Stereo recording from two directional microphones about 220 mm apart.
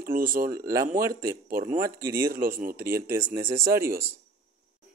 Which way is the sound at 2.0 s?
10° right (ahead or behind).